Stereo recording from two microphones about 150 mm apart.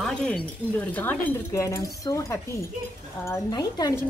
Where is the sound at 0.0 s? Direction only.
5° left (ahead or behind); by 3.9 s 25° left (ahead or behind).